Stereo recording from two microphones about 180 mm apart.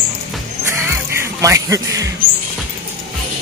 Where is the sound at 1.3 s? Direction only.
15° right (ahead or behind).